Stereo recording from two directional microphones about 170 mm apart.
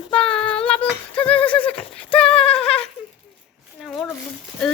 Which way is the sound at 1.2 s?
10° left (ahead or behind).